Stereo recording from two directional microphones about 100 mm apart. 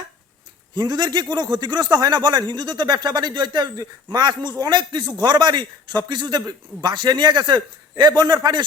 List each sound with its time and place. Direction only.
0.8 s a man's voice: 45° right (ahead or behind)